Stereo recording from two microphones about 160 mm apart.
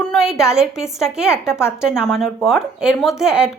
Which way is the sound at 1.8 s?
5° right (ahead or behind).